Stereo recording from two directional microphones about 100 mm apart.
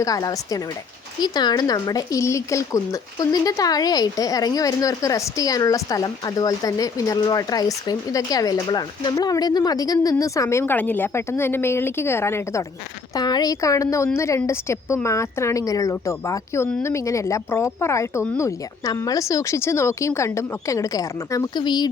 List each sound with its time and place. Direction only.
0.0 s speech: 40° left (ahead or behind)
13.1 s a woman's voice: 45° left (ahead or behind)
21.5 s speech: 45° left (ahead or behind)